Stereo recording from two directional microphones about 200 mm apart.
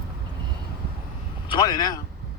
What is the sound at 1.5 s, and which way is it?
Speech, 20° left (ahead or behind).